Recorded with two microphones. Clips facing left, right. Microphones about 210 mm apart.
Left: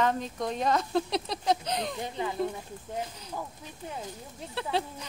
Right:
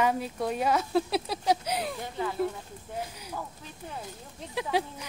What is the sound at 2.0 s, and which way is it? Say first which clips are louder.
Speech: even; 20° left (ahead or behind).